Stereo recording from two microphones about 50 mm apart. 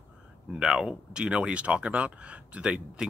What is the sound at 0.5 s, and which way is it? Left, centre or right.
Speech, centre.